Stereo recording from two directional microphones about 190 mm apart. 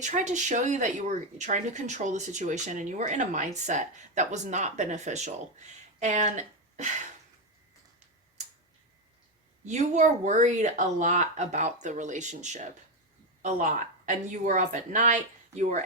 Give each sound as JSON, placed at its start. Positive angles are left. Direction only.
{"t": 0.0, "sound": "speech", "side_deg": -40}
{"t": 9.6, "sound": "speech", "side_deg": -40}